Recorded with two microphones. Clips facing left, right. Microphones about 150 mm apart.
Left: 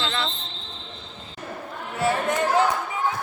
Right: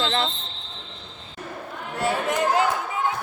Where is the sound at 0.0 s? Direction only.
45° right (ahead or behind).